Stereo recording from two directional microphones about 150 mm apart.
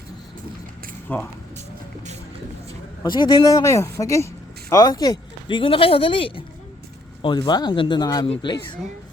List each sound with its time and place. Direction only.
1.0 s speech: 10° left (ahead or behind)
3.0 s a woman's voice: 30° left (ahead or behind)